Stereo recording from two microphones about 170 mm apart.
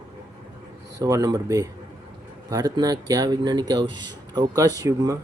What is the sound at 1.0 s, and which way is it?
Speech, 20° right (ahead or behind).